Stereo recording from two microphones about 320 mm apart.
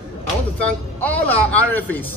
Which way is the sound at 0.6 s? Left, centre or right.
Centre.